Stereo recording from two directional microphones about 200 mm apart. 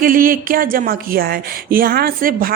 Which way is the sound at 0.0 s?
45° right (ahead or behind).